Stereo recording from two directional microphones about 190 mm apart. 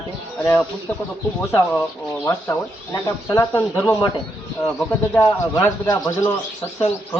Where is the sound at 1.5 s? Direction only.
15° left (ahead or behind).